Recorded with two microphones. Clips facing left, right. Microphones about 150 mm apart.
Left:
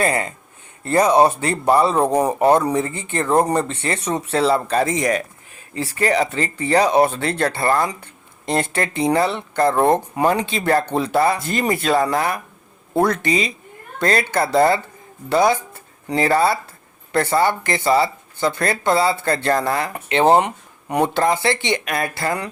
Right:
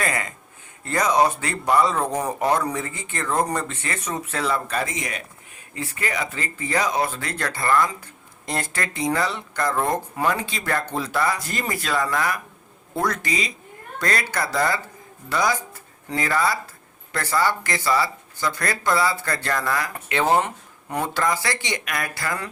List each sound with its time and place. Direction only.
0.0 s speech: 30° left (ahead or behind)